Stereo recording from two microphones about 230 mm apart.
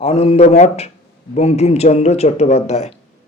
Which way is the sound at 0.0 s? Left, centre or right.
Left.